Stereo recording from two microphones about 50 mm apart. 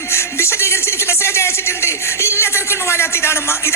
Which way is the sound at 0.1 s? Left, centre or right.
Left.